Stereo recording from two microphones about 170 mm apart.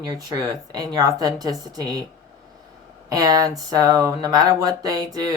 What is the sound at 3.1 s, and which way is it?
Speech, 20° right (ahead or behind).